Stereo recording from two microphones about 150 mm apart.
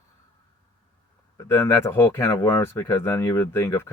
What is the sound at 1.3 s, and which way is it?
Speech, 15° left (ahead or behind).